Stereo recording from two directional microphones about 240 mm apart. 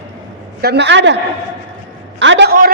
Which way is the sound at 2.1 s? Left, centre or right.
Right.